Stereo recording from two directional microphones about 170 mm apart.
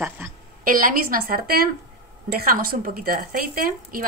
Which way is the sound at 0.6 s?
55° right (ahead or behind).